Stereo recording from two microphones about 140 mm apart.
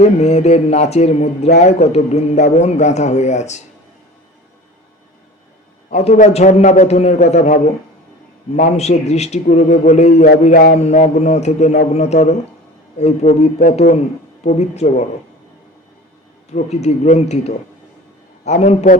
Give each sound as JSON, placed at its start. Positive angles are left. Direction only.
{"t": 0.0, "sound": "a man's voice", "side_deg": 50}
{"t": 5.9, "sound": "a man's voice", "side_deg": 55}
{"t": 10.5, "sound": "mantra", "side_deg": 90}
{"t": 10.8, "sound": "a man's voice", "side_deg": 55}
{"t": 16.5, "sound": "a man's voice", "side_deg": 50}